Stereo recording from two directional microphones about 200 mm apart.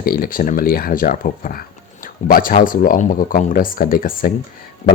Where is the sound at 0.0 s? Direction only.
45° left (ahead or behind).